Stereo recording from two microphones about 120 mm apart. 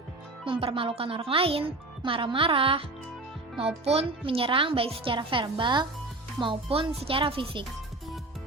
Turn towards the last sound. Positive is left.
turn(degrees=-50)  # may be behind; listen again after turning